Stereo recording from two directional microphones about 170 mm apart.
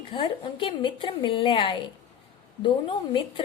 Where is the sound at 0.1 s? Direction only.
30° left (ahead or behind).